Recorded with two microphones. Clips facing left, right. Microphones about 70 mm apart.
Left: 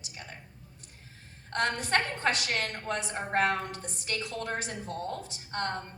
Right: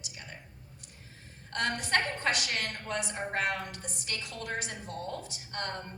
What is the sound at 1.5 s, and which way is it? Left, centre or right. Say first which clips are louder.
A woman's voice: left 2 dB; left.